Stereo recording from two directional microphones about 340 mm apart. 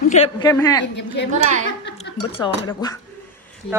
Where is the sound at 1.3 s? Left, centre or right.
Right.